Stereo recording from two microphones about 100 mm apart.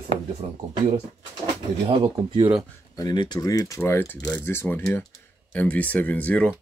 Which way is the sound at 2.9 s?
45° left (ahead or behind).